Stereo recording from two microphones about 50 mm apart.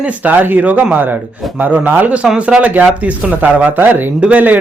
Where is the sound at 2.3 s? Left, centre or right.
Right.